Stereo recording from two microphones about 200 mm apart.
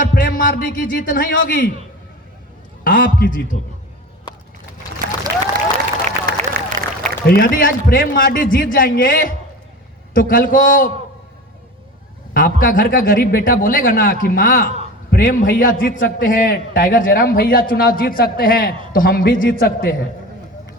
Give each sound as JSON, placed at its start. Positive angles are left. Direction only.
{"t": 0.0, "sound": "a man's voice", "side_deg": 45}
{"t": 2.8, "sound": "a man's voice", "side_deg": 45}
{"t": 4.3, "sound": "a sound", "side_deg": 20}
{"t": 6.1, "sound": "a sound", "side_deg": -40}
{"t": 7.3, "sound": "a man's voice", "side_deg": 45}
{"t": 12.3, "sound": "a man's voice", "side_deg": 45}